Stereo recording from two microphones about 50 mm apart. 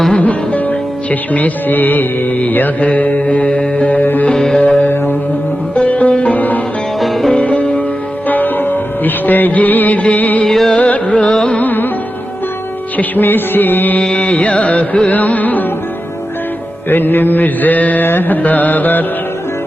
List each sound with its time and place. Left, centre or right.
0.1 s music: left
4.3 s music: centre
4.5 s music: left
7.0 s music: centre
7.3 s music: left
8.3 s music: left
10.4 s music: centre
10.8 s music: left
11.3 s carnatic music: centre
11.5 s music: left
13.0 s music: left
14.0 s music: left
16.9 s music: left